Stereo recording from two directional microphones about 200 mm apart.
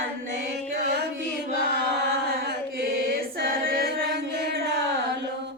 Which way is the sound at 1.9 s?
50° right (ahead or behind).